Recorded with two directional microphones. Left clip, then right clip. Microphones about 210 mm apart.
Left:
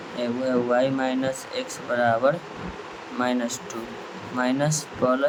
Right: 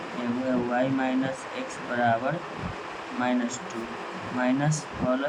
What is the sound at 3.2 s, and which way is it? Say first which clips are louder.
Speech: left 3 dB; 25° left (ahead or behind).